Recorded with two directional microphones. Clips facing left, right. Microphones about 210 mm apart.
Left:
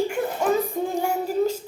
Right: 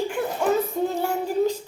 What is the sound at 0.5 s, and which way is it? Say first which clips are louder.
Music: right 1 dB; 10° left (ahead or behind).